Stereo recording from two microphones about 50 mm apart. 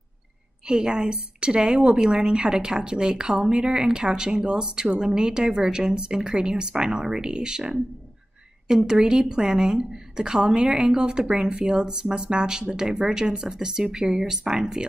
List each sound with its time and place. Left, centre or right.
0.7 s a woman's voice: centre